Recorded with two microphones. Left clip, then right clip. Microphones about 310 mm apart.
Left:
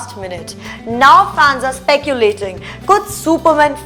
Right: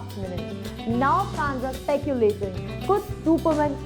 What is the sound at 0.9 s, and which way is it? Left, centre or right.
A woman's voice, centre.